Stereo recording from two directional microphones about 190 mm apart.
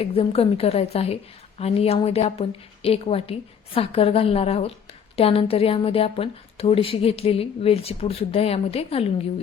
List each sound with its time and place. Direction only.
0.0 s a woman's voice: 30° left (ahead or behind)